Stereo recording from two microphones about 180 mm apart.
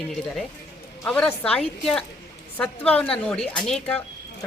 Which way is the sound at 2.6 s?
5° left (ahead or behind).